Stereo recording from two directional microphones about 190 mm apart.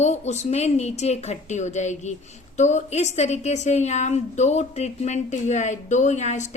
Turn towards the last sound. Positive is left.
turn(degrees=40)  # may be behind; listen again after turning